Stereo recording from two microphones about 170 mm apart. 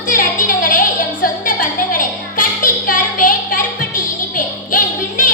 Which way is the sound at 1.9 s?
55° left (ahead or behind).